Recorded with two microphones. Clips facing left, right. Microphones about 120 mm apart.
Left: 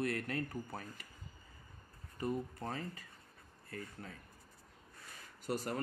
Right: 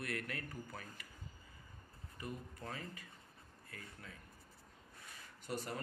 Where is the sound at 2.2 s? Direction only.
35° left (ahead or behind).